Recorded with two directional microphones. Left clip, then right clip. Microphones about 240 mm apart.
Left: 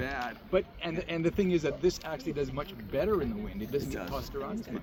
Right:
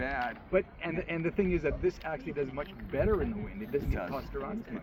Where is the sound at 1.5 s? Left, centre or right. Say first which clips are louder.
Left 2 dB; left.